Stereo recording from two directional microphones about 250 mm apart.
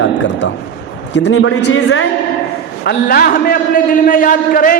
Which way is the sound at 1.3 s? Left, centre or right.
Left.